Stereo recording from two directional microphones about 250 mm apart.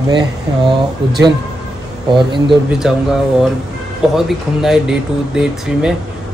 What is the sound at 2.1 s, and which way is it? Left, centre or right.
Speech, centre.